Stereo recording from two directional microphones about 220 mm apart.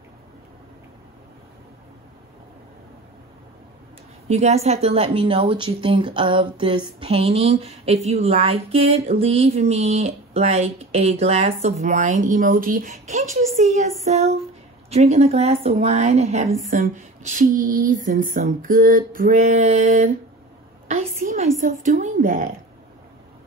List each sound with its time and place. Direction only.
4.3 s a woman's voice: 30° right (ahead or behind)